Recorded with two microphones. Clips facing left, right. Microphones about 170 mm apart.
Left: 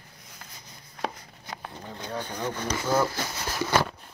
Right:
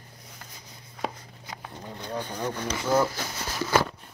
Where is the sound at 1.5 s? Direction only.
5° right (ahead or behind).